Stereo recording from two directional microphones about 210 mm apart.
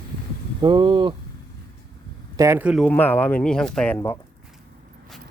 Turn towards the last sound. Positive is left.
turn(degrees=10)  # may be behind; listen again after turning